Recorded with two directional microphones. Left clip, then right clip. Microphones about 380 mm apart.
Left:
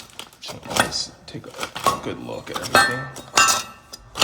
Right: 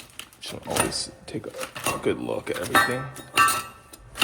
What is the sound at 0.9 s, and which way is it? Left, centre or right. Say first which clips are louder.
Speech: left 3 dB; centre.